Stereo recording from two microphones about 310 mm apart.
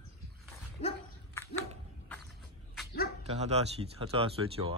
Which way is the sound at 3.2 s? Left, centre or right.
Right.